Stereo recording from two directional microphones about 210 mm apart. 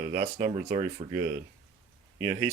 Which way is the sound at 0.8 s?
35° right (ahead or behind).